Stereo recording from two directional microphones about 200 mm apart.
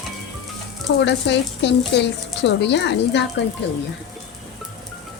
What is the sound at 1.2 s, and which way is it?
Speech, 60° left (ahead or behind).